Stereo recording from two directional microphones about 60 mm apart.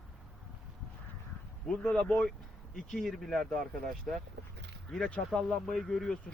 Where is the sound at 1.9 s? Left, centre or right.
Centre.